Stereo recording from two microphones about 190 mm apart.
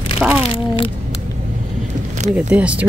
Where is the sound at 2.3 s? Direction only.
5° right (ahead or behind).